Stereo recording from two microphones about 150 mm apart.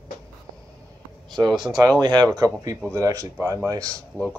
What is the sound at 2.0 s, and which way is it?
Speech, 30° right (ahead or behind).